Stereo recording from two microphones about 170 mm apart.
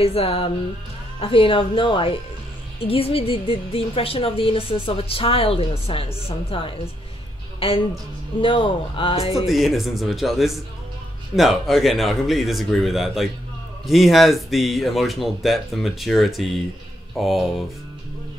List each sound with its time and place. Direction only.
0.0 s a woman's voice: 35° left (ahead or behind)
8.4 s a woman's voice: 30° left (ahead or behind)
9.3 s speech: centre (ahead or behind)